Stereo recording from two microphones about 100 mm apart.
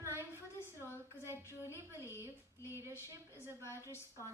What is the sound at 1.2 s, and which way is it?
Speech, 25° right (ahead or behind).